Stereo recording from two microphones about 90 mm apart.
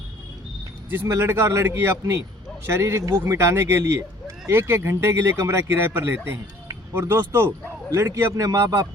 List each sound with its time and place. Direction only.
0.9 s a man's voice: 25° right (ahead or behind)